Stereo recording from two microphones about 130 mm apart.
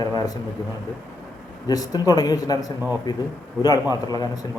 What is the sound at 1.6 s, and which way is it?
A man's voice, 30° left (ahead or behind).